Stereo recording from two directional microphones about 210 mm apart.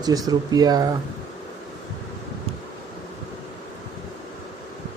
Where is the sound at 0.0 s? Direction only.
15° right (ahead or behind).